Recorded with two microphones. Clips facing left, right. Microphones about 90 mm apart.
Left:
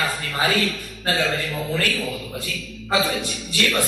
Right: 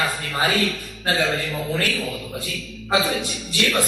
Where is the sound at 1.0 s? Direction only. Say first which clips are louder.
Right 1 dB; 35° right (ahead or behind).